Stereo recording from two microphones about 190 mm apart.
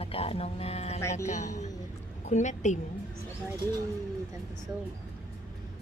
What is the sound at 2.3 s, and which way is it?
Speech, 40° left (ahead or behind).